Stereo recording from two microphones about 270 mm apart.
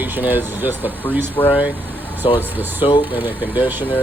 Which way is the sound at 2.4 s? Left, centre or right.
Centre.